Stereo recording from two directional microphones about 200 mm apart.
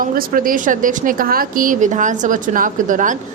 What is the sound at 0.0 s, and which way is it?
A woman's voice, 45° right (ahead or behind).